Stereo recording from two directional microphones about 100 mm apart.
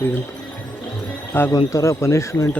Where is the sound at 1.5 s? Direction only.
30° left (ahead or behind).